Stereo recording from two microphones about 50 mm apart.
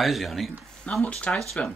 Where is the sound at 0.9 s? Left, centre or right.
Left.